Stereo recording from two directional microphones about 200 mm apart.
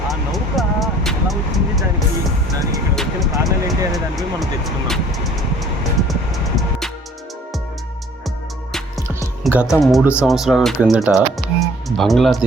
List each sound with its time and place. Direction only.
0.1 s vehicle: centre (ahead or behind)
2.9 s music: centre (ahead or behind)
9.4 s speech: 5° right (ahead or behind)
11.6 s music: centre (ahead or behind)